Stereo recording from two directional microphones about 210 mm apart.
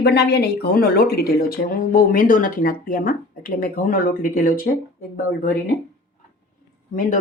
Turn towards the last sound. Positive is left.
turn(degrees=40)  # may be behind; listen again after turning